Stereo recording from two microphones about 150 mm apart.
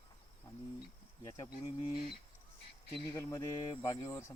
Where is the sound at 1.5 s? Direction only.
35° left (ahead or behind).